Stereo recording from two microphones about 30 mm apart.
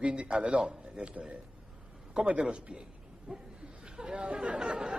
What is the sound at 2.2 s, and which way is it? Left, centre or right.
Speech, right.